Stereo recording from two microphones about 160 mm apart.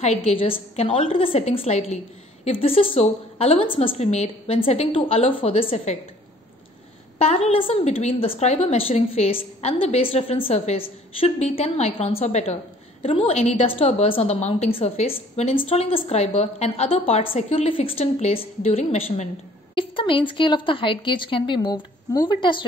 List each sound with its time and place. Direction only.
0.0 s a woman's voice: 40° left (ahead or behind)
7.2 s a woman's voice: 40° left (ahead or behind)